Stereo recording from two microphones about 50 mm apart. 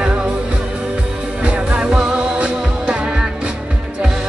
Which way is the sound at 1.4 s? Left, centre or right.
Centre.